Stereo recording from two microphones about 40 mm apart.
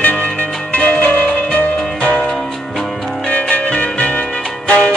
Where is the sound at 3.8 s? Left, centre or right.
Left.